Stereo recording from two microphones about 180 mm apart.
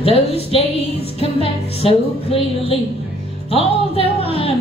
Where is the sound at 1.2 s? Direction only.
30° left (ahead or behind).